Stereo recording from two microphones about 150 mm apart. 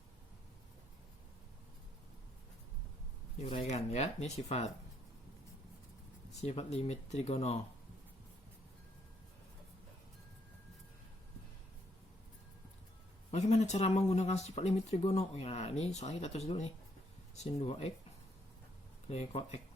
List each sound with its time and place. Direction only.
3.4 s speech: 45° left (ahead or behind)
6.4 s speech: 45° left (ahead or behind)
13.3 s speech: 50° left (ahead or behind)
19.0 s speech: 40° left (ahead or behind)